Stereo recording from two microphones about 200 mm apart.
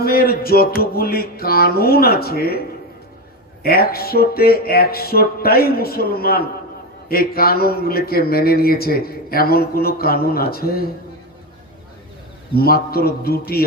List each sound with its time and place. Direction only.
0.0 s speech: 50° left (ahead or behind)
12.5 s speech: 50° left (ahead or behind)